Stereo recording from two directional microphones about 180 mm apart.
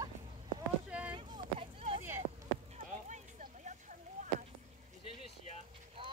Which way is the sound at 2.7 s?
40° right (ahead or behind).